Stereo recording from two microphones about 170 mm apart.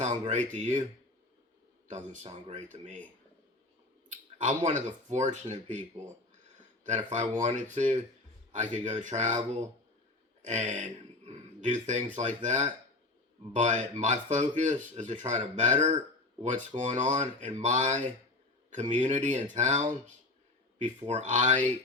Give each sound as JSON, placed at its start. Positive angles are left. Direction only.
{"t": 0.0, "sound": "speech", "side_deg": -45}
{"t": 1.9, "sound": "speech", "side_deg": -45}
{"t": 4.1, "sound": "a sound", "side_deg": -45}
{"t": 5.0, "sound": "speech", "side_deg": -45}
{"t": 10.4, "sound": "speech", "side_deg": -45}
{"t": 21.1, "sound": "speech", "side_deg": -45}